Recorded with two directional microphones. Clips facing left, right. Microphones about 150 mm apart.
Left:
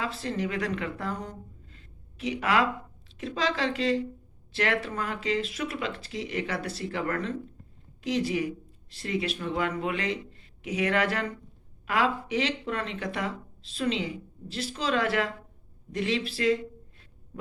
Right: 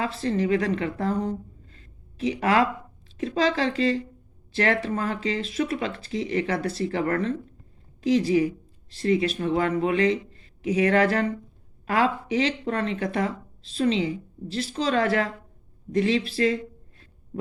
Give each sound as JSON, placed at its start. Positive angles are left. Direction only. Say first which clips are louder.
{"t": 0.2, "sound": "a woman's voice", "louder": "right 10 dB", "side_deg": -35}